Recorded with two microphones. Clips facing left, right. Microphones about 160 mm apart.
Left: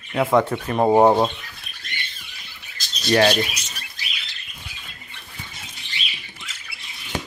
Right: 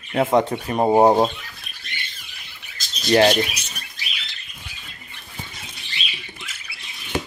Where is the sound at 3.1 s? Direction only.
25° right (ahead or behind).